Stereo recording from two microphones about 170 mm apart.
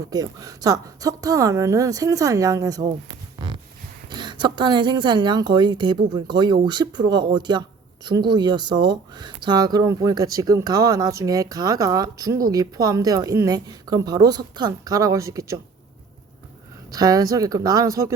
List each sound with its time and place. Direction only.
0.1 s speech: 20° right (ahead or behind)
3.3 s heart sounds: 25° right (ahead or behind)
4.1 s speech: 25° right (ahead or behind)
16.9 s speech: 20° right (ahead or behind)